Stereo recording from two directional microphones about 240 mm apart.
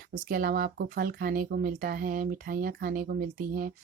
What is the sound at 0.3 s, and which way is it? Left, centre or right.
Speech, right.